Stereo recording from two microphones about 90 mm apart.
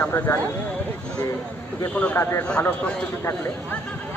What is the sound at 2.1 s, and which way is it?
Speech, 30° left (ahead or behind).